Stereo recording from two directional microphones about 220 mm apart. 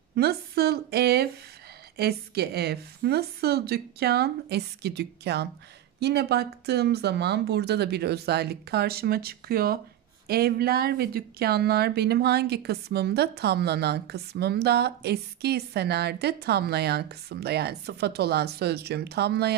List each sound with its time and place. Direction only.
0.1 s speech: 45° right (ahead or behind)